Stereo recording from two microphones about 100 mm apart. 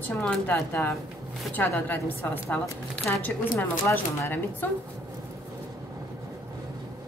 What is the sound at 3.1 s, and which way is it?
Speech, 30° left (ahead or behind).